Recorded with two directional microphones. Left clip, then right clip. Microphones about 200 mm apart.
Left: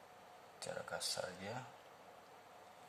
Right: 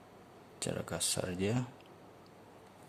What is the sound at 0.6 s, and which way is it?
Speech, 40° right (ahead or behind).